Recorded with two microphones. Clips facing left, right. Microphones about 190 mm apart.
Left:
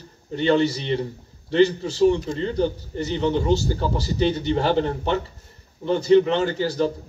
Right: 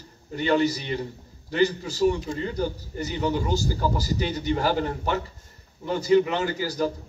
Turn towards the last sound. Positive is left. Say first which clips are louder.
# left 4 dB
turn(degrees=25)  # may be behind; listen again after turning